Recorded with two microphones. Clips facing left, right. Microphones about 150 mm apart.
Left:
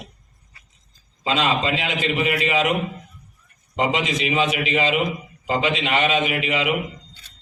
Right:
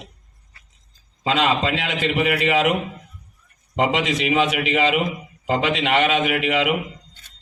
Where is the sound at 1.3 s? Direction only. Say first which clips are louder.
Right 1 dB; 60° right (ahead or behind).